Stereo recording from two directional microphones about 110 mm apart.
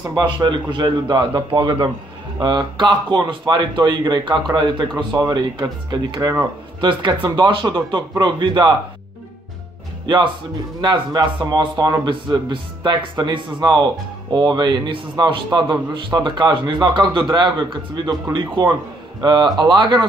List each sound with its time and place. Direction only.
0.1 s speech: 45° right (ahead or behind)
10.0 s speech: 40° right (ahead or behind)
19.2 s speech: 40° right (ahead or behind)